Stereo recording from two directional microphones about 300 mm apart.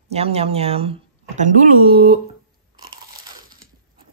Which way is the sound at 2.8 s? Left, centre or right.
Right.